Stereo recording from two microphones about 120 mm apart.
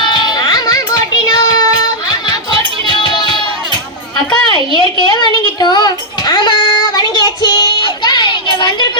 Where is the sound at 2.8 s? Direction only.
40° left (ahead or behind).